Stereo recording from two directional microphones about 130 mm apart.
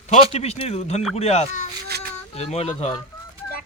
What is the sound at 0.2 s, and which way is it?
Speech, 50° left (ahead or behind).